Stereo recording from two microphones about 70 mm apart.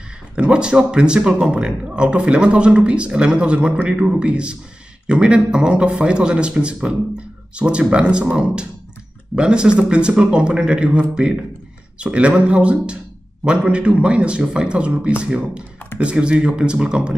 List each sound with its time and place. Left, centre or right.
0.4 s speech: centre